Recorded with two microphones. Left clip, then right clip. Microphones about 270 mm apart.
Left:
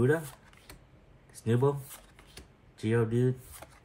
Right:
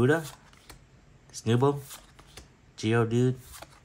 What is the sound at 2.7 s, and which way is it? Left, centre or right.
Speech, centre.